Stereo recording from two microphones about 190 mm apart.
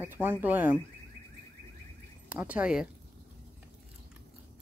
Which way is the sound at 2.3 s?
10° right (ahead or behind).